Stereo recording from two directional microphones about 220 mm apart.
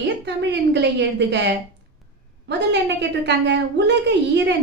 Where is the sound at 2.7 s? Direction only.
50° right (ahead or behind).